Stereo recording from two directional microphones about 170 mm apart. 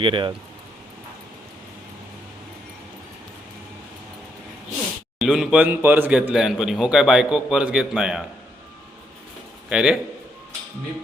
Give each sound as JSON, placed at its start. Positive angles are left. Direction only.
{"t": 0.0, "sound": "speech", "side_deg": -30}
{"t": 5.2, "sound": "a man's voice", "side_deg": -5}
{"t": 9.6, "sound": "a man's voice", "side_deg": -5}